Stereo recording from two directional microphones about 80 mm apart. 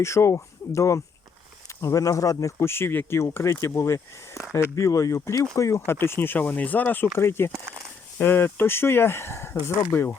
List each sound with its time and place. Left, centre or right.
0.0 s speech: left
5.8 s speech: left
7.5 s a sound: right
8.2 s speech: left